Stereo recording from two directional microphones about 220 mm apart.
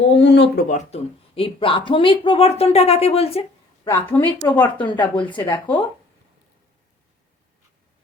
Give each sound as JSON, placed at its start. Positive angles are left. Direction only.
{"t": 0.2, "sound": "speech", "side_deg": 50}
{"t": 0.7, "sound": "speech", "side_deg": 30}
{"t": 3.8, "sound": "a woman's voice", "side_deg": 10}
{"t": 4.6, "sound": "speech", "side_deg": 20}
{"t": 5.2, "sound": "a woman's voice", "side_deg": 5}
{"t": 5.5, "sound": "a woman's voice", "side_deg": 15}